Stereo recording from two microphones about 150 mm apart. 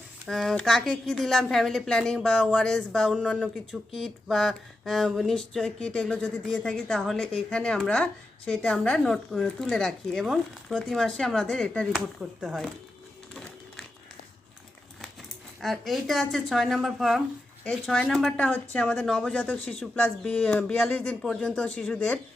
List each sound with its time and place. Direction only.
0.3 s a woman's voice: centre (ahead or behind)
11.9 s a woman's voice: 5° right (ahead or behind)
13.3 s a sound: 5° left (ahead or behind)
15.6 s a woman's voice: centre (ahead or behind)